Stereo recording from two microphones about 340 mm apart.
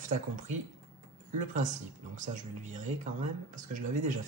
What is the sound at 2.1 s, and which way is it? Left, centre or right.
Speech, right.